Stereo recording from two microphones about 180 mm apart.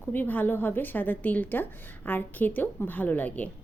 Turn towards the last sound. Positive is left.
turn(degrees=10)  # may be behind; listen again after turning